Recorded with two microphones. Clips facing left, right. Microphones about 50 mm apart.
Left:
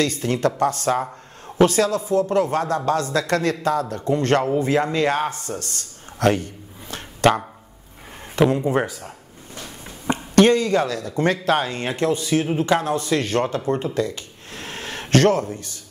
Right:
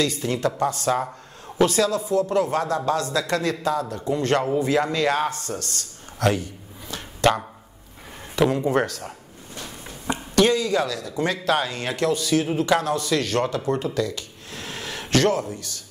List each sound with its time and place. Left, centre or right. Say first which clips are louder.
0.0 s speech: left 2 dB; left
5.8 s a sound: left 2 dB; left
8.5 s speech: even; centre
10.0 s speech: left 4 dB; left